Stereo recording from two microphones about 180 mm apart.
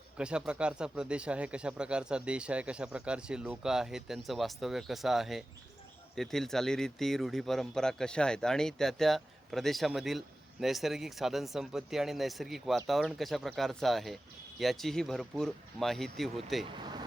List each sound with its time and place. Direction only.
0.2 s speech: 5° right (ahead or behind)
16.6 s vehicle: 25° right (ahead or behind)